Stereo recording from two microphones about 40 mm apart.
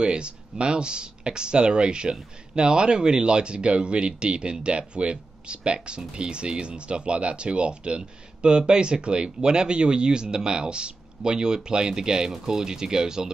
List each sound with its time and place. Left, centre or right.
0.0 s speech: right